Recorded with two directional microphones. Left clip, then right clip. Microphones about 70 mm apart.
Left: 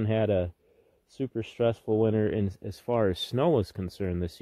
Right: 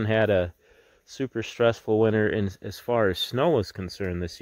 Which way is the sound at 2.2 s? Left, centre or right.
Right.